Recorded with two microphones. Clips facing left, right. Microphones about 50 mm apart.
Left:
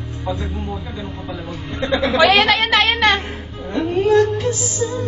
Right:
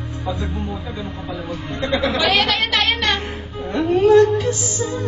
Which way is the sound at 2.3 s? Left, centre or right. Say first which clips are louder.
Left 4 dB; left.